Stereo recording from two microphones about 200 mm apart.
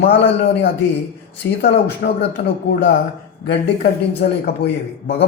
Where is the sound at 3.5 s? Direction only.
55° left (ahead or behind).